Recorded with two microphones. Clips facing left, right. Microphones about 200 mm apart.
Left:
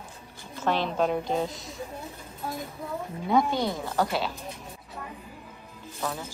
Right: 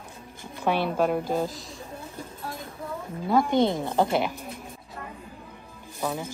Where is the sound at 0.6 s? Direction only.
10° right (ahead or behind).